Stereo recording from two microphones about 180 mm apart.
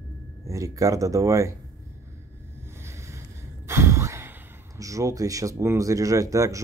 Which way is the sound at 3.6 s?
15° right (ahead or behind).